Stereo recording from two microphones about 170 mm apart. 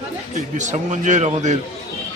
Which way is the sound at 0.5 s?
45° right (ahead or behind).